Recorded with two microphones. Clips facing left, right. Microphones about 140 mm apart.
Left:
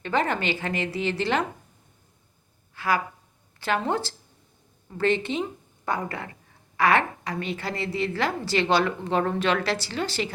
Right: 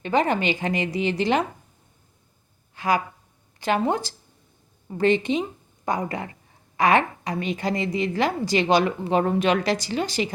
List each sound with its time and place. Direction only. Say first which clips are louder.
0.0 s a woman's voice: right 4 dB; 15° right (ahead or behind)
2.7 s a woman's voice: right 2 dB; 20° right (ahead or behind)